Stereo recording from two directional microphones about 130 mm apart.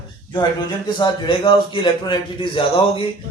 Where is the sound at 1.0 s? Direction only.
40° left (ahead or behind).